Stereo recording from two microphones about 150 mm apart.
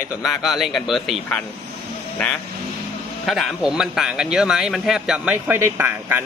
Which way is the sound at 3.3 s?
Centre (ahead or behind).